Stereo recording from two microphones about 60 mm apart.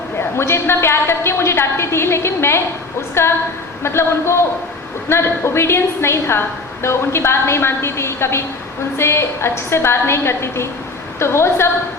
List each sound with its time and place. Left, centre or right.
0.2 s a woman's voice: left